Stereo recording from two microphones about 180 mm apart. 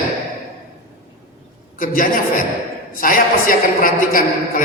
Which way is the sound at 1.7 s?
50° left (ahead or behind).